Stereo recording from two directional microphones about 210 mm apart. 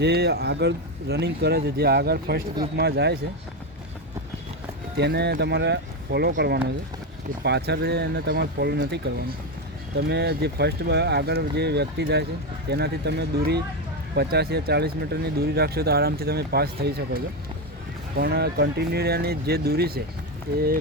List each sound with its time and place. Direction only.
0.0 s speech: 50° right (ahead or behind)
4.9 s speech: 50° right (ahead or behind)